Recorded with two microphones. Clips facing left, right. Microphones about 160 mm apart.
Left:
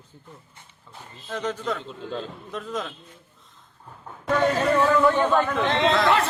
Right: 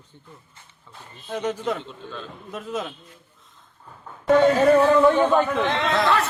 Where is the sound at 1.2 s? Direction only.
10° right (ahead or behind).